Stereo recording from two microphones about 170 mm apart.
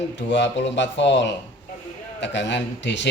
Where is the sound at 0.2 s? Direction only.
90° left.